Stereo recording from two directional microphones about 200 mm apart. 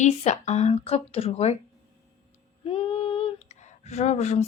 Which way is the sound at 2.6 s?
25° left (ahead or behind).